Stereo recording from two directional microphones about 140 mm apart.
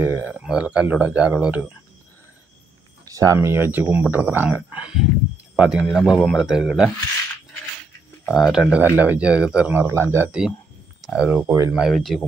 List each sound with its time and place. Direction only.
0.0 s speech: 15° right (ahead or behind)
3.1 s speech: 25° right (ahead or behind); by 6.9 s 5° right (ahead or behind)
8.3 s speech: centre (ahead or behind); by 11.7 s 20° right (ahead or behind)
11.7 s speech: centre (ahead or behind)